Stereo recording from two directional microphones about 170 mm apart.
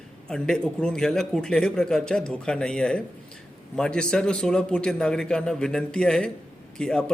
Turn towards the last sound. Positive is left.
turn(degrees=5)  # may be behind; listen again after turning